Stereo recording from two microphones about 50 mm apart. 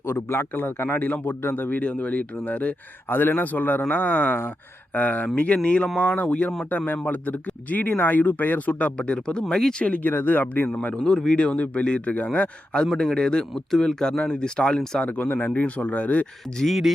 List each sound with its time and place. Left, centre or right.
0.0 s a man's voice: left
1.8 s speech: left
3.1 s speech: left
5.6 s speech: left
9.0 s speech: centre
9.8 s speech: left
10.1 s speech: left
10.9 s speech: centre
11.5 s speech: left
12.9 s speech: centre
13.1 s speech: centre
13.5 s speech: centre
15.0 s speech: left
16.6 s speech: centre